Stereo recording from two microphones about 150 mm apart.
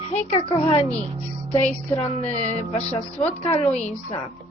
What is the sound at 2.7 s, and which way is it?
Speech, 45° left (ahead or behind).